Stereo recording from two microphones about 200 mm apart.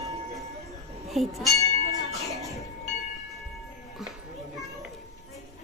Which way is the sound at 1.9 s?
15° right (ahead or behind).